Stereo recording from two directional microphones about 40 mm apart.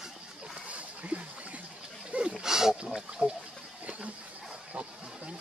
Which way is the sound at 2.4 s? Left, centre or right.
Centre.